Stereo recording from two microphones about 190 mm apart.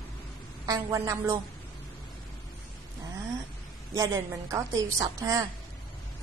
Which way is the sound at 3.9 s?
20° right (ahead or behind).